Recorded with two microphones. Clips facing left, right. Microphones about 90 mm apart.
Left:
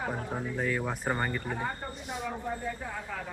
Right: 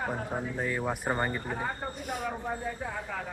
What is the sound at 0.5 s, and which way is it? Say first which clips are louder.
Speech: left 2 dB; 10° right (ahead or behind).